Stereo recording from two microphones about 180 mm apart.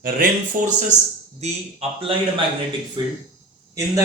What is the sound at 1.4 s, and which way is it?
A man's voice, 35° right (ahead or behind).